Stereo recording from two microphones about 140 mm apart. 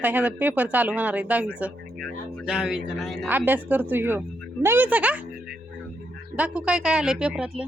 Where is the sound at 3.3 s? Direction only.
10° right (ahead or behind).